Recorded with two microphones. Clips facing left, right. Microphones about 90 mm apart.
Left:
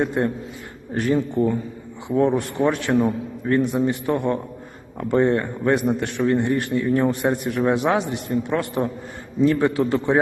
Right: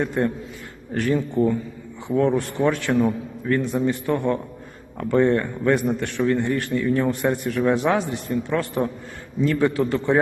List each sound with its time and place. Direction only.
0.0 s a man's voice: 20° left (ahead or behind)